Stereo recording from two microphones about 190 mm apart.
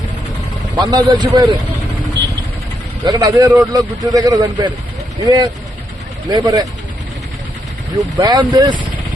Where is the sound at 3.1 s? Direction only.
20° right (ahead or behind).